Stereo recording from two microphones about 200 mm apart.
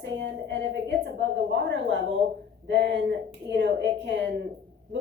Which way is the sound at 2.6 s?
60° right (ahead or behind).